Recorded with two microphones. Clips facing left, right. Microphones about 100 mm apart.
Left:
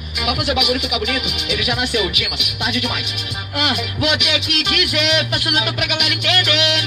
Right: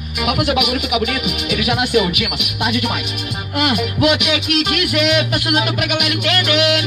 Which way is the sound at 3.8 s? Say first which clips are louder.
Right 5 dB; 45° right (ahead or behind).